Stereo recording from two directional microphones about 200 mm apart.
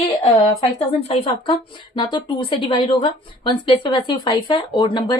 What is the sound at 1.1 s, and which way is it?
A woman's voice, 25° left (ahead or behind).